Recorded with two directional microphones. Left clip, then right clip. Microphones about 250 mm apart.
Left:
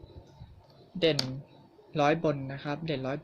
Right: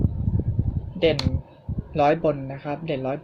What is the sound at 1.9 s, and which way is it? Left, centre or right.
Speech, left.